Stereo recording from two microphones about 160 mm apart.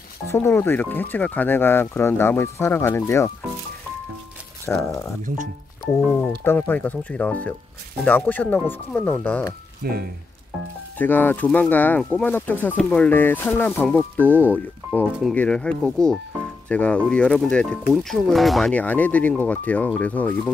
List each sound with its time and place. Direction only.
0.3 s speech: 15° left (ahead or behind)
4.6 s speech: 20° left (ahead or behind)
5.9 s speech: 5° left (ahead or behind)
9.8 s speech: 75° right (ahead or behind)
11.0 s speech: 10° left (ahead or behind)